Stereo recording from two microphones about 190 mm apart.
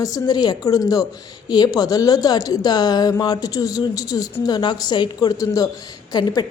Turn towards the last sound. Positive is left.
turn(degrees=20)  # may be behind; listen again after turning